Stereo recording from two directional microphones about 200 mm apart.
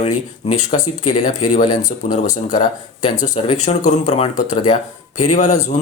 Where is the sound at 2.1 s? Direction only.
40° left (ahead or behind).